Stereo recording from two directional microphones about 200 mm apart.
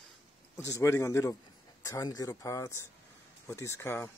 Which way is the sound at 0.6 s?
15° left (ahead or behind).